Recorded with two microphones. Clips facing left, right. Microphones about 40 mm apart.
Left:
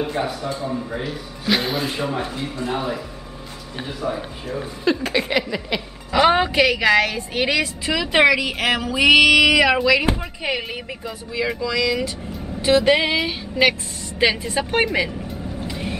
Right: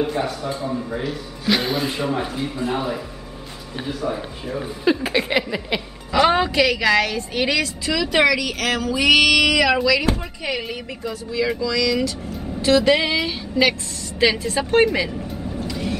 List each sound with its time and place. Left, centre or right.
0.2 s a woman's voice: centre
6.1 s a woman's voice: centre
15.6 s vehicle: left